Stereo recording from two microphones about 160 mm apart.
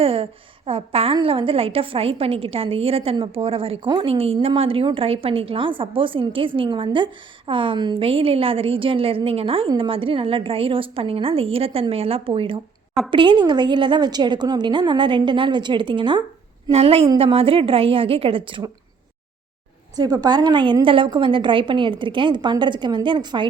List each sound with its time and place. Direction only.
0.0 s a woman's voice: 35° right (ahead or behind)
20.0 s a woman's voice: 25° right (ahead or behind)